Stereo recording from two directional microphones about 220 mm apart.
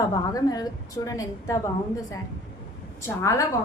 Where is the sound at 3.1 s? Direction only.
15° left (ahead or behind).